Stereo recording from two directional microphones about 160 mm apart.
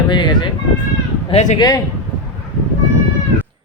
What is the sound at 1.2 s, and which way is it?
Speech, 45° left (ahead or behind).